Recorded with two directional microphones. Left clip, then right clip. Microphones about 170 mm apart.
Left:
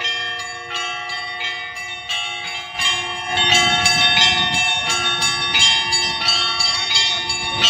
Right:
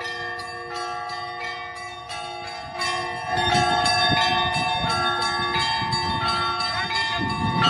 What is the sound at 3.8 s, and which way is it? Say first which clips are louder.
Church bell: left 6 dB; 25° right (ahead or behind).